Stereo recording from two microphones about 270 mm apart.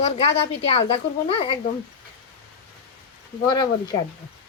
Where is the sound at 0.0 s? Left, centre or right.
Left.